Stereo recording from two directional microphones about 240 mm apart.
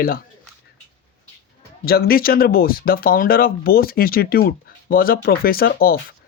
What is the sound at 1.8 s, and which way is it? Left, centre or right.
Speech, left.